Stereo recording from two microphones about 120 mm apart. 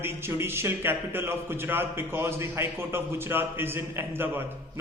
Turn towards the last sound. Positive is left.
turn(degrees=-20)  # may be behind; listen again after turning